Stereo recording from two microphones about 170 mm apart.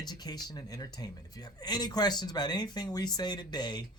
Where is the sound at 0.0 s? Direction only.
25° left (ahead or behind).